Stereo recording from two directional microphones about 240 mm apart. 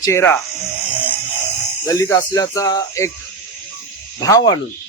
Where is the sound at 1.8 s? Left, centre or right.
Centre.